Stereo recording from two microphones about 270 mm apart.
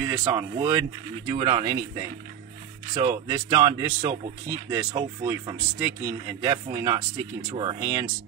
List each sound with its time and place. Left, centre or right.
0.0 s speech: centre